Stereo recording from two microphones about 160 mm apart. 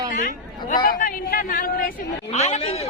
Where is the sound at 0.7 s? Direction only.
60° left (ahead or behind).